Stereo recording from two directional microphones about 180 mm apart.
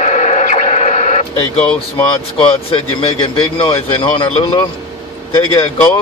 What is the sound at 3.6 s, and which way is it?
Speech, 25° left (ahead or behind).